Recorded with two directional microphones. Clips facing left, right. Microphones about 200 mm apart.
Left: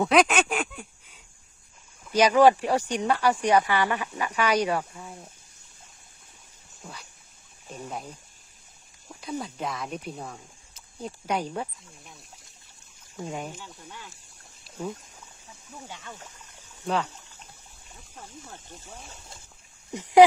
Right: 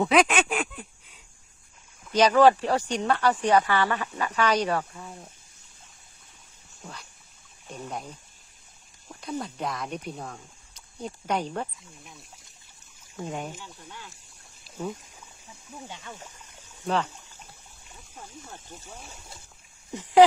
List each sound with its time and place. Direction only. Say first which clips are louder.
0.0 s a sound: left 1 dB; centre (ahead or behind)
2.0 s speech: even; 10° left (ahead or behind)
6.8 s a sound: even; 10° left (ahead or behind)
7.8 s speech: even; 5° left (ahead or behind)
13.1 s speech: even; centre (ahead or behind)
14.6 s a sound: even; centre (ahead or behind)
15.9 s speech: right 1 dB; 15° right (ahead or behind)
16.8 s speech: right 1 dB; 10° left (ahead or behind)
19.9 s speech: left 1 dB; 15° left (ahead or behind)